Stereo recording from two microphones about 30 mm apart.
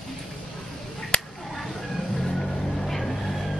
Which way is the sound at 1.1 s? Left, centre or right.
Left.